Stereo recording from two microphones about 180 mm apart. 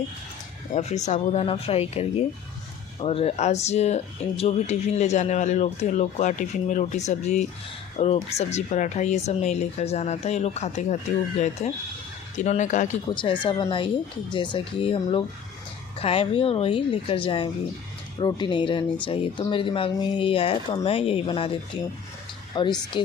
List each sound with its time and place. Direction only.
0.7 s speech: 40° left (ahead or behind)
13.1 s speech: 25° left (ahead or behind)